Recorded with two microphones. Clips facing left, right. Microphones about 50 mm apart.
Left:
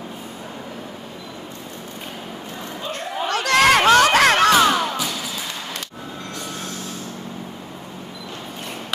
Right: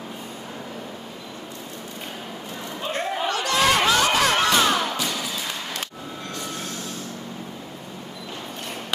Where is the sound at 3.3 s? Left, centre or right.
Left.